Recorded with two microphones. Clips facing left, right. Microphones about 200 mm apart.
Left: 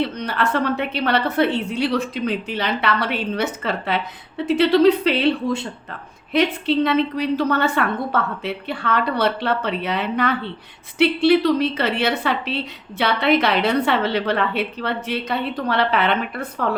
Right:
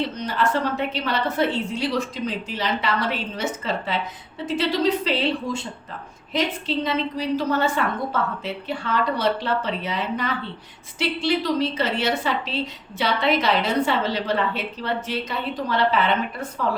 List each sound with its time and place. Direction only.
0.0 s a woman's voice: 65° left (ahead or behind)